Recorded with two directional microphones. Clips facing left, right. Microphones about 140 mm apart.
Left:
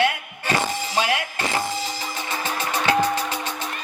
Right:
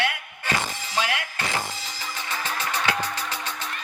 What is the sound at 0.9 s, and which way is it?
Speech, 15° left (ahead or behind).